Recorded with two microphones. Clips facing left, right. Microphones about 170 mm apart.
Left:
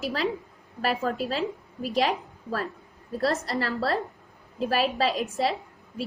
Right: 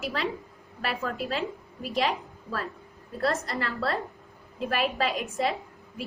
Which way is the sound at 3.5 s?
35° left (ahead or behind).